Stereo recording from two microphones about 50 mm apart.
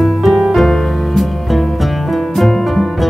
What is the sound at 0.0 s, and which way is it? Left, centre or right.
Music, centre.